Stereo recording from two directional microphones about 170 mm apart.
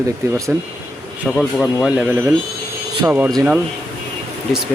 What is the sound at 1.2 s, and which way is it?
Speech, 5° left (ahead or behind).